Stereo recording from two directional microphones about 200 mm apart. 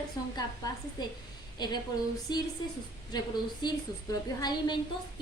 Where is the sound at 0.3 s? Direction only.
20° left (ahead or behind).